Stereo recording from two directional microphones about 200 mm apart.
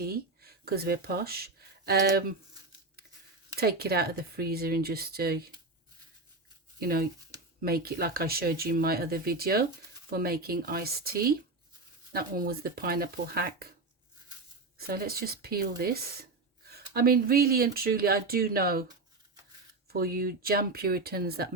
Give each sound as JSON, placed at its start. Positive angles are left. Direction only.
{"t": 0.0, "sound": "speech", "side_deg": -50}
{"t": 3.6, "sound": "speech", "side_deg": -50}
{"t": 6.7, "sound": "speech", "side_deg": -50}
{"t": 14.8, "sound": "speech", "side_deg": -50}
{"t": 19.9, "sound": "speech", "side_deg": -50}